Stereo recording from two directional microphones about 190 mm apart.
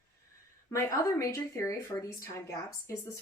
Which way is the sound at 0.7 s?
15° left (ahead or behind).